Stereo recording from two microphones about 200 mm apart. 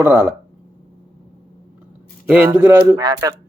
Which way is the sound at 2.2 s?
10° right (ahead or behind).